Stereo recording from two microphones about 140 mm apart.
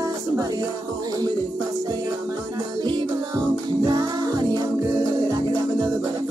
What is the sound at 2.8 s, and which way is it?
Music, 30° right (ahead or behind).